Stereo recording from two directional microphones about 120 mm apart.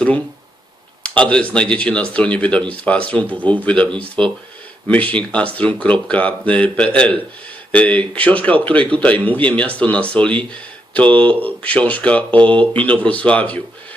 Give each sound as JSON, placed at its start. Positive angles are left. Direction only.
{"t": 1.0, "sound": "a man's voice", "side_deg": 10}